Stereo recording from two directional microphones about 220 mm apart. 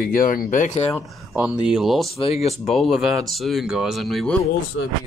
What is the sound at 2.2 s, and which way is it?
Speech, 25° left (ahead or behind).